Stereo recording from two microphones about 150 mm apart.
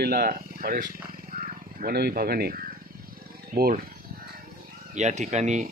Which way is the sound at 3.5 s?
80° right.